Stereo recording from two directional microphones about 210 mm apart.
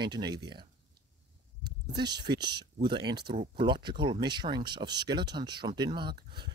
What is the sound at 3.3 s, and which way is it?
Speech, 35° right (ahead or behind).